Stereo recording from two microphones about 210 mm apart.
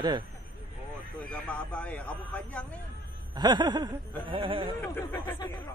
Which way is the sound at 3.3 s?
20° right (ahead or behind).